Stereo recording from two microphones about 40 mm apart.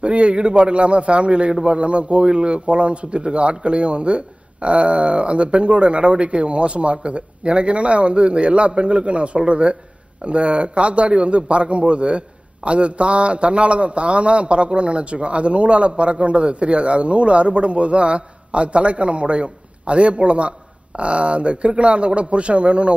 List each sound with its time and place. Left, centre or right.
0.0 s a man's voice: right